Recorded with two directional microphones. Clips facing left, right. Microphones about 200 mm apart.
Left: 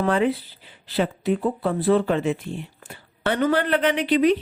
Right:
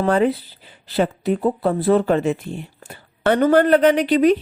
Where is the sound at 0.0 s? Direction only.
40° right (ahead or behind).